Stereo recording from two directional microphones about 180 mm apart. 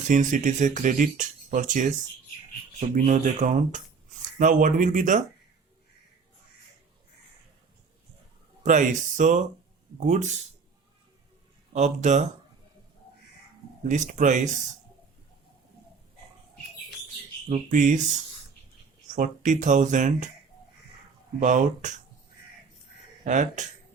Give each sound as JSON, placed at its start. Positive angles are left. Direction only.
{"t": 0.1, "sound": "speech", "side_deg": -45}
{"t": 2.9, "sound": "speech", "side_deg": -45}
{"t": 8.6, "sound": "speech", "side_deg": -45}
{"t": 11.7, "sound": "speech", "side_deg": -40}
{"t": 13.8, "sound": "speech", "side_deg": -45}
{"t": 17.5, "sound": "speech", "side_deg": -45}
{"t": 19.0, "sound": "speech", "side_deg": -45}
{"t": 21.4, "sound": "speech", "side_deg": -45}
{"t": 23.2, "sound": "speech", "side_deg": -45}